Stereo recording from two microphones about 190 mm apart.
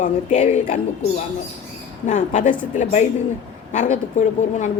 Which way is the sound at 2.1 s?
40° left (ahead or behind).